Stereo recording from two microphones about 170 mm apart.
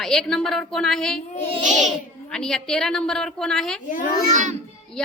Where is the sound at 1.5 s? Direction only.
45° right (ahead or behind).